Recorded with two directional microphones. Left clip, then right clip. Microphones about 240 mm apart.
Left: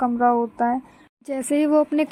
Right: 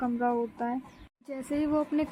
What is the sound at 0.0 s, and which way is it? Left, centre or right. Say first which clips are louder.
Speech: left 10 dB; centre.